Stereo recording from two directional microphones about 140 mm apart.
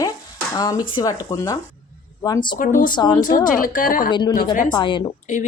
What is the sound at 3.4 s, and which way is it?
Speech, 80° left.